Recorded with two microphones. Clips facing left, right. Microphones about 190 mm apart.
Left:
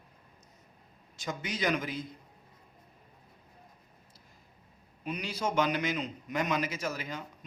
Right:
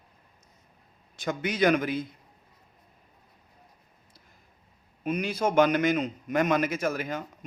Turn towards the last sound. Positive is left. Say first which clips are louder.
# right 7 dB
turn(degrees=-55)  # may be behind; listen again after turning